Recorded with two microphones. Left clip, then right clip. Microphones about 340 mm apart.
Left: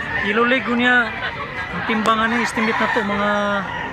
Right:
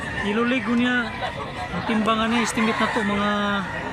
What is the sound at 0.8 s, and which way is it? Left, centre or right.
Speech, centre.